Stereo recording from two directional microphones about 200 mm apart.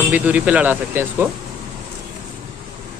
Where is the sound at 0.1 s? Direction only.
5° right (ahead or behind).